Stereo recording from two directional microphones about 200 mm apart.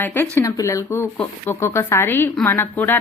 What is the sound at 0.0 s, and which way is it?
A woman's voice, 10° left (ahead or behind).